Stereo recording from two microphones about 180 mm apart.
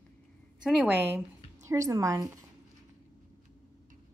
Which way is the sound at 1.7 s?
15° right (ahead or behind).